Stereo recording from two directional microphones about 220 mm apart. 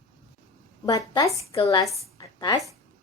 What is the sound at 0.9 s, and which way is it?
A woman's voice, 15° left (ahead or behind).